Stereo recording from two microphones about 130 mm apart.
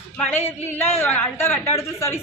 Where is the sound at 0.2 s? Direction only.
15° left (ahead or behind).